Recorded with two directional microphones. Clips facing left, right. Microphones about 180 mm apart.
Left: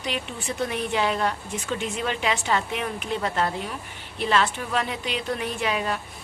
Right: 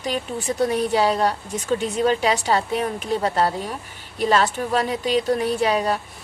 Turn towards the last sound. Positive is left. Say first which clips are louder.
# right 6 dB
turn(degrees=-40)  # may be behind; listen again after turning